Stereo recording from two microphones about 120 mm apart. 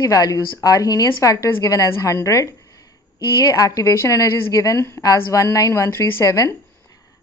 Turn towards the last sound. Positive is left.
turn(degrees=25)  # may be behind; listen again after turning